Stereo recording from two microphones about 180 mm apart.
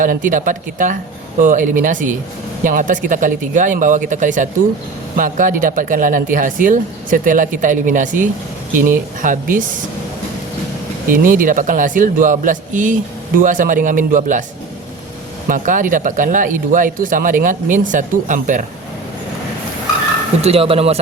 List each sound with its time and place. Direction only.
0.0 s speech: 45° right (ahead or behind)
11.1 s speech: 50° right (ahead or behind)
15.4 s speech: 45° right (ahead or behind)
20.4 s speech: 35° right (ahead or behind)